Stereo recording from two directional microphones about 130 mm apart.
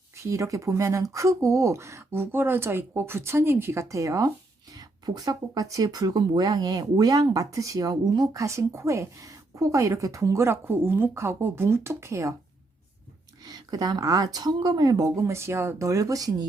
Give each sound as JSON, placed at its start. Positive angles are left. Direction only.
{"t": 0.2, "sound": "speech", "side_deg": -25}
{"t": 13.4, "sound": "speech", "side_deg": -30}